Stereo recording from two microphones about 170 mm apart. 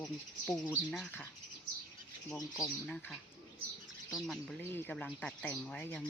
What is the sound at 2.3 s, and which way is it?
Speech, 20° left (ahead or behind).